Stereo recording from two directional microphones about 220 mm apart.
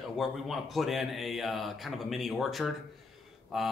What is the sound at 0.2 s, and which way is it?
Speech, centre (ahead or behind).